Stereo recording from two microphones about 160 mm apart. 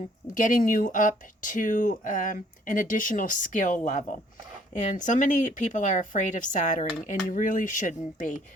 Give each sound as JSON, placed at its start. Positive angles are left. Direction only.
{"t": 0.3, "sound": "speech", "side_deg": 55}